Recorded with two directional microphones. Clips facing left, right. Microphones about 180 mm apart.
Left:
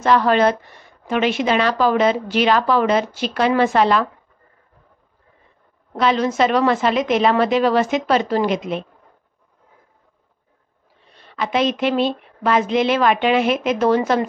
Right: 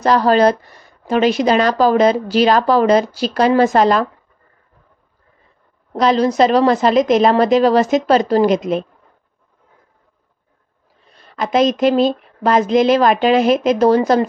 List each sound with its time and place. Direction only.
0.0 s speech: 35° right (ahead or behind)
5.9 s speech: 35° right (ahead or behind)
11.1 s speech: 45° right (ahead or behind)